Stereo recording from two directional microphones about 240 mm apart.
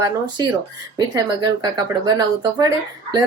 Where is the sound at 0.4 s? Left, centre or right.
Centre.